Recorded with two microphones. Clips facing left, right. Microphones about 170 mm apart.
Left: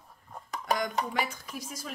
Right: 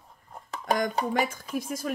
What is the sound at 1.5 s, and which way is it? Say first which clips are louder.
Speech: right 9 dB; 50° right (ahead or behind).